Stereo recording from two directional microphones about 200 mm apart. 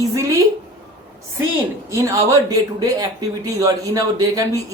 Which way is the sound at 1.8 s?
15° right (ahead or behind).